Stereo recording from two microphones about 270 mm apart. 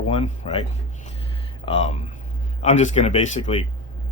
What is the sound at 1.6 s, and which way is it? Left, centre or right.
Speech, left.